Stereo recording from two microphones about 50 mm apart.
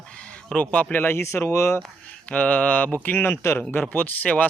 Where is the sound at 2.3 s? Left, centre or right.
Left.